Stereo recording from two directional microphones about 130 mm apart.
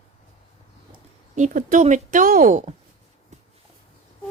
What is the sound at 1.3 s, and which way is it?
Speech, 75° right (ahead or behind).